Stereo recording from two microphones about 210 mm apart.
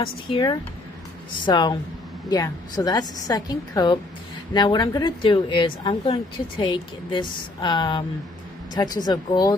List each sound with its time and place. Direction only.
0.0 s a woman's voice: 25° left (ahead or behind)